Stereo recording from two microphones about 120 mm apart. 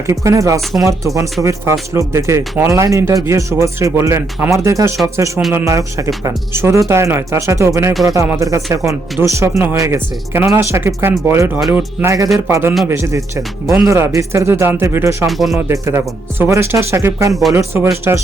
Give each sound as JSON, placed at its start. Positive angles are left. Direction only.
{"t": 0.1, "sound": "speech", "side_deg": -25}
{"t": 15.3, "sound": "speech", "side_deg": 0}
{"t": 15.5, "sound": "speech", "side_deg": -20}